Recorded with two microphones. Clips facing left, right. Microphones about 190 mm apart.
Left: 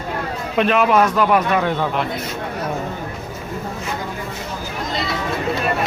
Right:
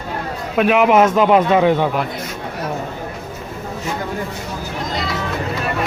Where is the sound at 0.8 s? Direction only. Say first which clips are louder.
Right 4 dB; 20° right (ahead or behind).